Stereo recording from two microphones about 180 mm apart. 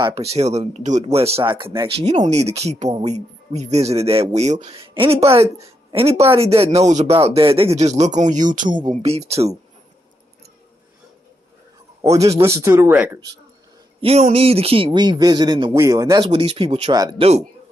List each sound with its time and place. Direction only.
0.0 s speech: 35° right (ahead or behind)
12.0 s a man's voice: 15° right (ahead or behind)
14.0 s speech: 35° right (ahead or behind)